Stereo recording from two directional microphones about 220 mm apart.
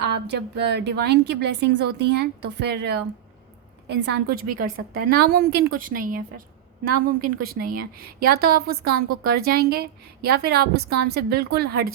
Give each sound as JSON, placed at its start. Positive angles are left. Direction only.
{"t": 0.0, "sound": "a woman's voice", "side_deg": -50}